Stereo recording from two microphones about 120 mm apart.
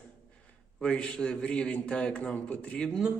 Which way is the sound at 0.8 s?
10° left (ahead or behind).